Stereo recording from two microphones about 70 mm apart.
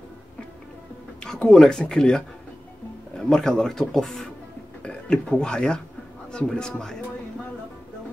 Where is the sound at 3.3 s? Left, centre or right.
Centre.